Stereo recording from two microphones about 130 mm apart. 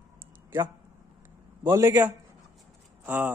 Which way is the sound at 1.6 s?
20° right (ahead or behind).